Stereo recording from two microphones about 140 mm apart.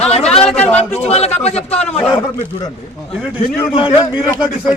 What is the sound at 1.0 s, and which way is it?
Speech, 45° left (ahead or behind).